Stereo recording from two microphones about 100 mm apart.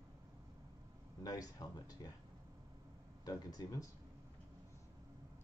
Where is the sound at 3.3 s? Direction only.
40° left (ahead or behind).